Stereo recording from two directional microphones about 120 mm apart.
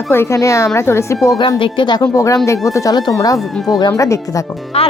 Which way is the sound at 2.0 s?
25° left (ahead or behind).